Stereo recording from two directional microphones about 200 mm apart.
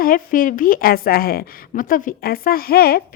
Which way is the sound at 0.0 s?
45° left (ahead or behind).